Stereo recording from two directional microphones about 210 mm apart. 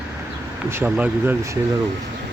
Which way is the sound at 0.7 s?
10° right (ahead or behind).